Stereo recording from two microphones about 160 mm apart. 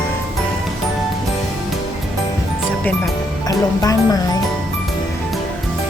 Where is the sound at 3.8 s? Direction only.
25° left (ahead or behind).